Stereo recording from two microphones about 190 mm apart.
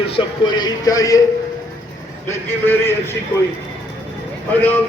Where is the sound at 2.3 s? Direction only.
10° left (ahead or behind).